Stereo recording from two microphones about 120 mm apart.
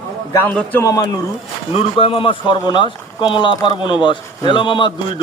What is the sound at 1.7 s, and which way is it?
A man's voice, 50° left (ahead or behind).